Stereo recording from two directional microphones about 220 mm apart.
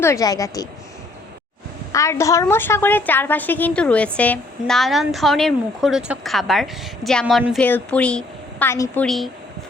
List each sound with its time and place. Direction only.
0.0 s speech: 15° left (ahead or behind)
1.9 s a woman's voice: 15° left (ahead or behind)
9.0 s a woman's voice: centre (ahead or behind)